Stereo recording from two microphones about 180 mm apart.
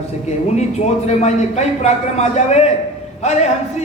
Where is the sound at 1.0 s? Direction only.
40° left (ahead or behind).